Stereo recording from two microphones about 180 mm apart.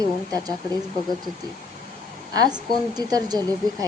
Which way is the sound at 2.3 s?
25° right (ahead or behind).